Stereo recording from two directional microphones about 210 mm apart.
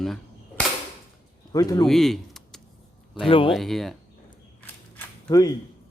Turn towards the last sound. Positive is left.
turn(degrees=15)  # may be behind; listen again after turning